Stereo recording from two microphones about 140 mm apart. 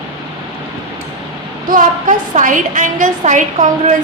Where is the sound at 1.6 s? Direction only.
70° right (ahead or behind).